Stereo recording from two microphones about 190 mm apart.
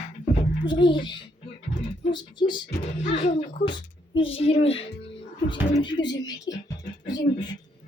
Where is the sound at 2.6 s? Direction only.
35° left (ahead or behind).